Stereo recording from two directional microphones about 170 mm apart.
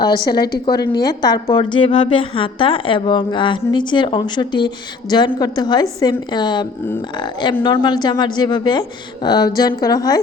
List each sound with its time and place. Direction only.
0.0 s a woman's voice: 25° left (ahead or behind)